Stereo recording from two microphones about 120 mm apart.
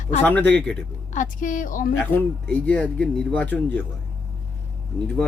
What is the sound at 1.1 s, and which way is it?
Speech, 90° left.